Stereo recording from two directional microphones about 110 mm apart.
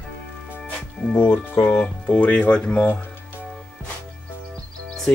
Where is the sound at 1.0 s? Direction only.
Centre (ahead or behind).